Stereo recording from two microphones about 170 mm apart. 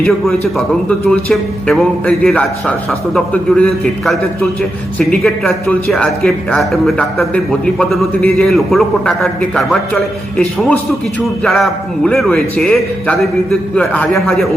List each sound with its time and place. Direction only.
0.0 s speech: 5° left (ahead or behind)